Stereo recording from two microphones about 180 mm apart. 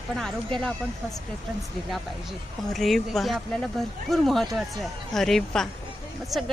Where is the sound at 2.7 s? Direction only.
Centre (ahead or behind).